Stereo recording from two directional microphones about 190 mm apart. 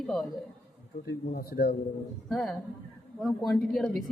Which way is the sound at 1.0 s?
55° left (ahead or behind).